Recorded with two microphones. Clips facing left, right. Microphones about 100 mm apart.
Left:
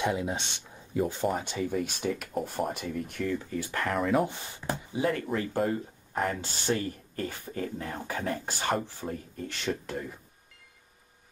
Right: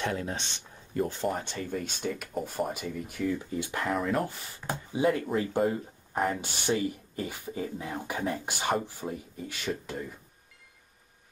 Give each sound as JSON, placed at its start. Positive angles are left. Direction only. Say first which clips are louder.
{"t": 0.0, "sound": "speech", "louder": "left 3 dB", "side_deg": 15}
{"t": 3.5, "sound": "speech", "louder": "even", "side_deg": -20}
{"t": 3.9, "sound": "speech", "louder": "left 3 dB", "side_deg": 0}
{"t": 4.9, "sound": "speech", "louder": "right 3 dB", "side_deg": -20}